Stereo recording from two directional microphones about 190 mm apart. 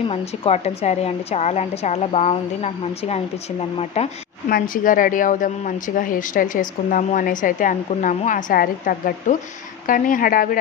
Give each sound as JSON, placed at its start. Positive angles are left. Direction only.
{"t": 0.1, "sound": "a woman's voice", "side_deg": 30}
{"t": 4.5, "sound": "a woman's voice", "side_deg": 50}